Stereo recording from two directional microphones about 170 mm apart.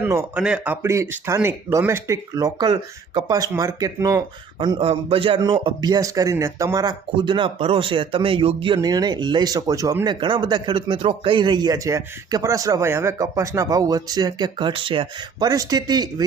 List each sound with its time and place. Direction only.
0.0 s a man's voice: 15° right (ahead or behind)
4.6 s a man's voice: 30° right (ahead or behind)